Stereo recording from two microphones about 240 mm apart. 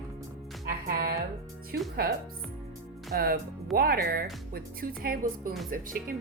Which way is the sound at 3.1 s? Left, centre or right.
Right.